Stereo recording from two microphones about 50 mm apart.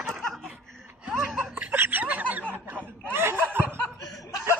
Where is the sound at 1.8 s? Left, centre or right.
Right.